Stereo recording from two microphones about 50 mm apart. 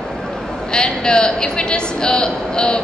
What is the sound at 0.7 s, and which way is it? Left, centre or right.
A woman's voice, centre.